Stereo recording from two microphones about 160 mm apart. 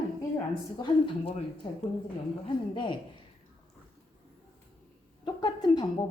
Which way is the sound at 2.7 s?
30° left (ahead or behind).